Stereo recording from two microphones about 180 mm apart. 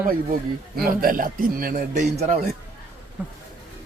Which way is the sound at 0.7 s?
55° right (ahead or behind).